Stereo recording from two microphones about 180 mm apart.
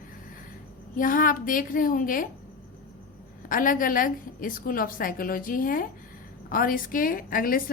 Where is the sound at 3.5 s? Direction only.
50° left (ahead or behind).